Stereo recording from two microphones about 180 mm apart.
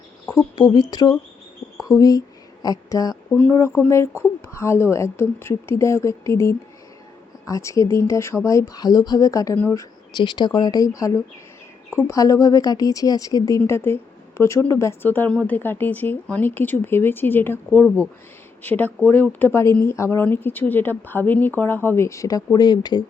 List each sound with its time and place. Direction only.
0.5 s speech: 20° left (ahead or behind)
10.2 s speech: 25° left (ahead or behind)